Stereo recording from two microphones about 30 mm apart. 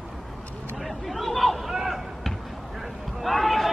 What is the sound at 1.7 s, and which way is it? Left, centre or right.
Basketball bounce, centre.